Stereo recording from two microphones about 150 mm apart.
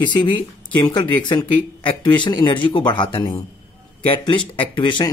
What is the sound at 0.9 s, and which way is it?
Speech, 30° left (ahead or behind).